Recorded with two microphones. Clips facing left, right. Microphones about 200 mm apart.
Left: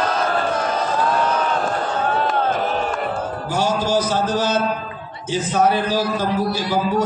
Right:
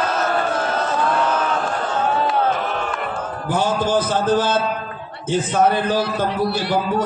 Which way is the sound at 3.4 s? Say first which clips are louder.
Right 2 dB; 55° right (ahead or behind).